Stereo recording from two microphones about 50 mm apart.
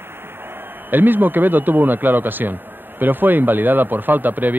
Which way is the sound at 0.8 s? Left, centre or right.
Right.